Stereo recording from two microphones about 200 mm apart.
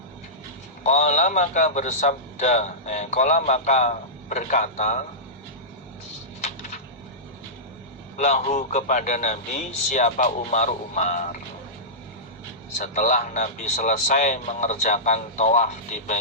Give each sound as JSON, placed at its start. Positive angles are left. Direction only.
{"t": 0.9, "sound": "a man's voice", "side_deg": 35}
{"t": 8.2, "sound": "a man's voice", "side_deg": 35}
{"t": 12.8, "sound": "a man's voice", "side_deg": 35}